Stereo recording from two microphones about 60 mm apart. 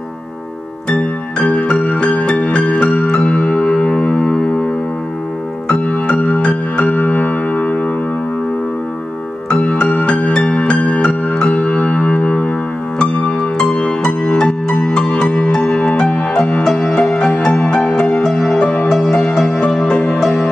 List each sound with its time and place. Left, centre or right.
0.8 s music: centre
5.7 s music: left
9.5 s music: left
18.2 s music: centre